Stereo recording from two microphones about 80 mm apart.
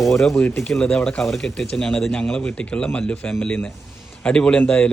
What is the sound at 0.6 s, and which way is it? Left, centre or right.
A man's voice, centre.